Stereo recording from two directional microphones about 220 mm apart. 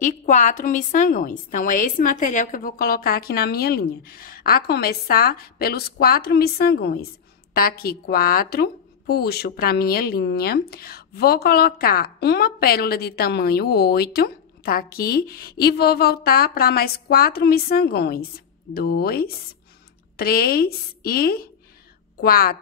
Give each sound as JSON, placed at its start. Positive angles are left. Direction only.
{"t": 0.0, "sound": "a woman's voice", "side_deg": 35}